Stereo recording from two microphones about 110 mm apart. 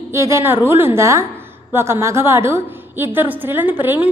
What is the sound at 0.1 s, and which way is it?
A woman's voice, 25° right (ahead or behind).